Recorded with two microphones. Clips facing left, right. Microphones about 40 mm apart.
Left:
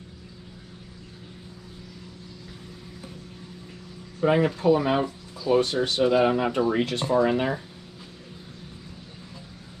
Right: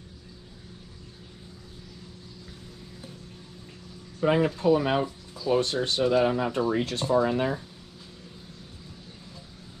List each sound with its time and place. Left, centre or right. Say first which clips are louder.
4.4 s speech: left 1 dB; left
5.8 s speech: left 2 dB; left
6.8 s speech: left 2 dB; left
7.2 s speech: left 2 dB; left